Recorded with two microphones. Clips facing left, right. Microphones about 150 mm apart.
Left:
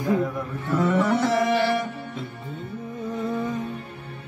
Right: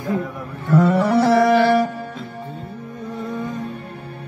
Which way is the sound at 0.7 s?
35° right (ahead or behind).